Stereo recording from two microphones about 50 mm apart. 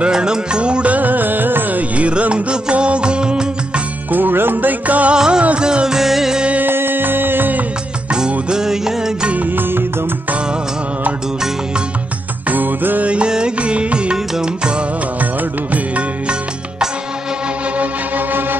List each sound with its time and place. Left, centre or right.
0.0 s music: centre
0.9 s music: right; by 3.8 s centre
4.1 s music: right
5.1 s music: centre
6.6 s music: right
8.1 s music: centre
9.6 s music: right
12.4 s music: right
13.1 s music: centre
17.7 s music: right